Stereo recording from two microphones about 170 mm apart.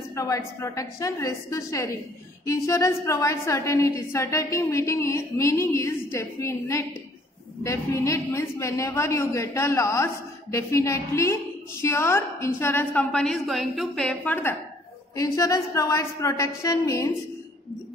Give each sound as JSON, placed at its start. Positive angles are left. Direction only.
{"t": 0.1, "sound": "a woman's voice", "side_deg": 20}